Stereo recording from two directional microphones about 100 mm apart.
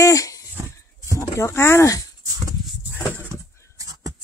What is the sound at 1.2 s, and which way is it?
Speech, 30° left (ahead or behind).